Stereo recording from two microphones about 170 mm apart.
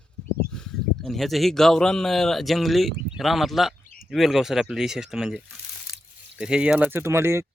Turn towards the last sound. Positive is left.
turn(degrees=-15)  # may be behind; listen again after turning